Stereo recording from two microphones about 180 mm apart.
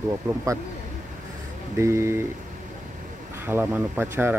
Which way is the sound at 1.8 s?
15° right (ahead or behind).